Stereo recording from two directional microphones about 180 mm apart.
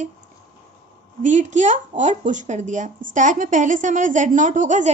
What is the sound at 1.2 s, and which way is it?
Speech, 40° right (ahead or behind).